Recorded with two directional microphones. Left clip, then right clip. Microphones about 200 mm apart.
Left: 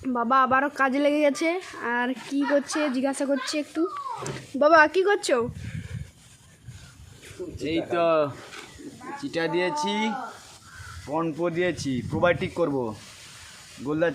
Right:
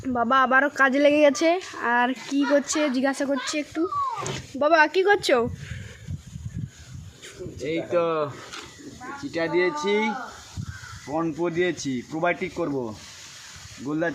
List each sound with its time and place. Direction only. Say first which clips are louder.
0.1 s speech: right 1 dB; centre (ahead or behind)
5.2 s speech: right 3 dB; 10° right (ahead or behind)
7.6 s speech: even; 35° left (ahead or behind)
9.2 s speech: right 2 dB; 20° left (ahead or behind)
11.1 s speech: even; 5° left (ahead or behind)